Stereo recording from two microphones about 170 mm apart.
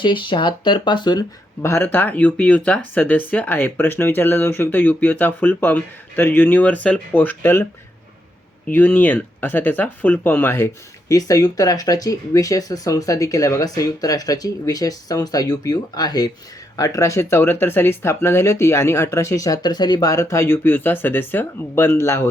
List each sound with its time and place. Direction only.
0.0 s speech: 30° left (ahead or behind)
1.6 s speech: 15° left (ahead or behind)